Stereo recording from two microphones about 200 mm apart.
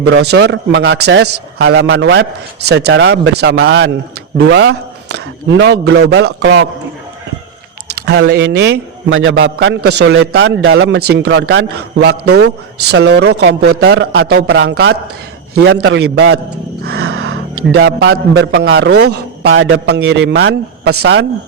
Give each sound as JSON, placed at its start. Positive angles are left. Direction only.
{"t": 0.1, "sound": "a man's voice", "side_deg": -55}
{"t": 7.9, "sound": "speech", "side_deg": -60}
{"t": 9.3, "sound": "a man's voice", "side_deg": -60}